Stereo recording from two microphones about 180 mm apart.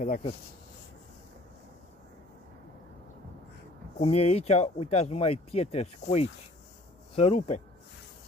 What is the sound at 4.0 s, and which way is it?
Speech, 35° left (ahead or behind).